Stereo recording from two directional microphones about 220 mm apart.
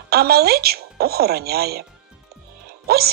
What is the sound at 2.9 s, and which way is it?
Speech, 45° right (ahead or behind).